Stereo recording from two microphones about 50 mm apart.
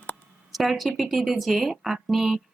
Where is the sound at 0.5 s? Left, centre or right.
Centre.